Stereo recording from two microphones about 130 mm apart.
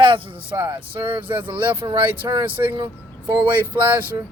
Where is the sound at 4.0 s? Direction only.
15° right (ahead or behind).